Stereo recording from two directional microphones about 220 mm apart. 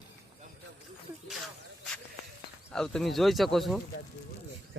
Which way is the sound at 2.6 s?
5° left (ahead or behind).